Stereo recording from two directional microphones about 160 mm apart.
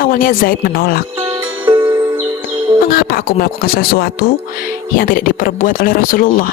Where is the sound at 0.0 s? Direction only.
65° left (ahead or behind).